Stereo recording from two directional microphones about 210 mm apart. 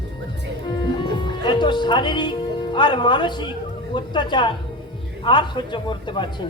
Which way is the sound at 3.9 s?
20° left (ahead or behind).